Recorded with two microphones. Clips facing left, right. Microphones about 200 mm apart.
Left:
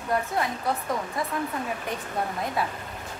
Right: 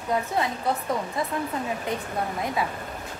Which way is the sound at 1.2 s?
25° right (ahead or behind).